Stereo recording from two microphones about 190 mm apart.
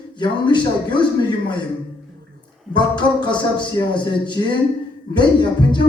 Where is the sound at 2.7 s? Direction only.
25° left (ahead or behind).